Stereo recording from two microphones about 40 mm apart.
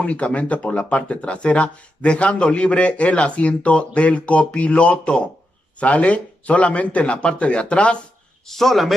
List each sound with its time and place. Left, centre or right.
0.0 s speech: left
8.5 s speech: centre